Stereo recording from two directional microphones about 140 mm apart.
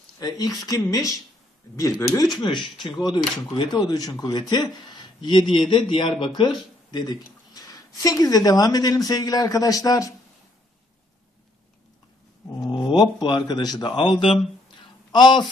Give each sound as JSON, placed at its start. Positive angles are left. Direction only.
{"t": 0.2, "sound": "a man's voice", "side_deg": 25}
{"t": 12.6, "sound": "a man's voice", "side_deg": 30}